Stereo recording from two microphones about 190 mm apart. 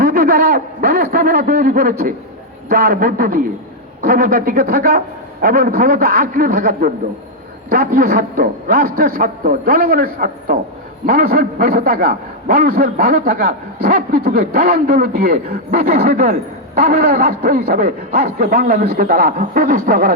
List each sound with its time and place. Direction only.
0.0 s a man's voice: 50° right (ahead or behind)